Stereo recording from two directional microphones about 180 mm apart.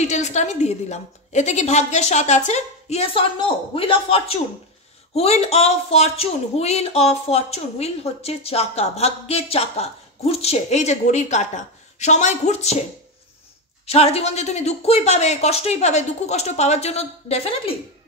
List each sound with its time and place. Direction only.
0.0 s speech: 40° left (ahead or behind)
13.8 s speech: 35° left (ahead or behind)